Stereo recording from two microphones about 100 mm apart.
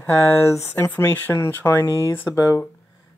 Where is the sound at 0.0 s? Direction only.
25° left (ahead or behind).